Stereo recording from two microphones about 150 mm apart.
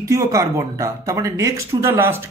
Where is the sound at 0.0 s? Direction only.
20° right (ahead or behind).